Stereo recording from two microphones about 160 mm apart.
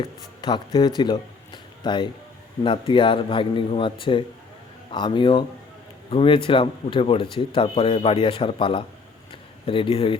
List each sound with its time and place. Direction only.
0.0 s speech: 30° left (ahead or behind)